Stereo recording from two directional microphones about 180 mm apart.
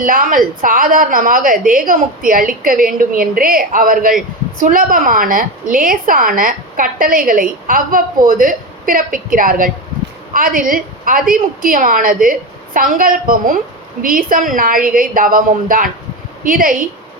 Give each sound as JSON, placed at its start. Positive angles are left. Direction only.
{"t": 0.0, "sound": "a woman's voice", "side_deg": -50}